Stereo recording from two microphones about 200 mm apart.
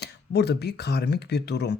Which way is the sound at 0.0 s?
55° left (ahead or behind).